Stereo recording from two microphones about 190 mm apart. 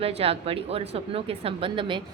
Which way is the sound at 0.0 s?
30° right (ahead or behind).